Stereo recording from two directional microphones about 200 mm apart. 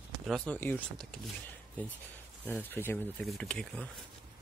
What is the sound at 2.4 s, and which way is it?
Speech, 10° left (ahead or behind).